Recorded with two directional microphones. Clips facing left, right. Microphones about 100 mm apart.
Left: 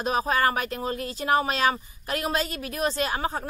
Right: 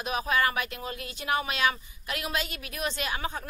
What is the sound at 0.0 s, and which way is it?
Speech, 35° left (ahead or behind).